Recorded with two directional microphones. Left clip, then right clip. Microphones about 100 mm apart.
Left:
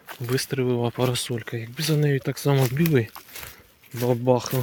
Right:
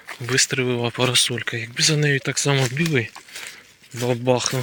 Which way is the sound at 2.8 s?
55° left (ahead or behind).